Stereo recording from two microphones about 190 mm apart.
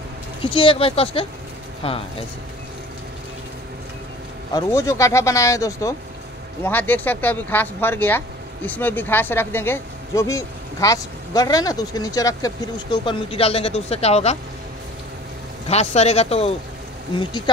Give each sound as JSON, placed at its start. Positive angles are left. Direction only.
{"t": 0.4, "sound": "speech", "side_deg": 25}
{"t": 4.6, "sound": "speech", "side_deg": 15}
{"t": 15.7, "sound": "speech", "side_deg": 35}